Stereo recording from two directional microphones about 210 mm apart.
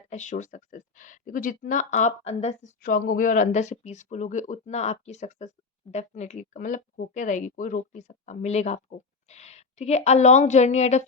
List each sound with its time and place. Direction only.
0.1 s speech: 35° left (ahead or behind)